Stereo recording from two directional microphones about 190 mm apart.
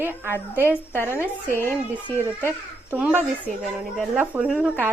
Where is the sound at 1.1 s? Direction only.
10° left (ahead or behind).